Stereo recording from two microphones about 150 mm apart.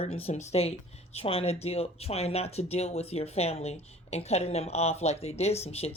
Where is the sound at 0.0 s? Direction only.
45° left (ahead or behind).